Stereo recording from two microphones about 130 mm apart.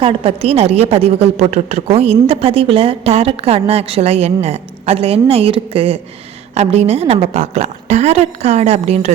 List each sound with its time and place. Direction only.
0.0 s a woman's voice: 45° right (ahead or behind)